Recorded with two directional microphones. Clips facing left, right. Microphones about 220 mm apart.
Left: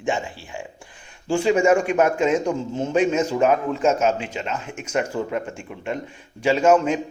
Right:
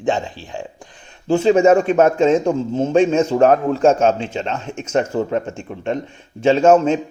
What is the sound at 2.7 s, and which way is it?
Speech, 50° right (ahead or behind).